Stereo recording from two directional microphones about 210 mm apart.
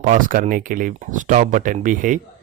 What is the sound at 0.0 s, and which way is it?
Speech, 40° right (ahead or behind).